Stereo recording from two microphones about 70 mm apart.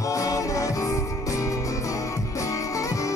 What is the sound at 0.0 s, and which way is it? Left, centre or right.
Music, left.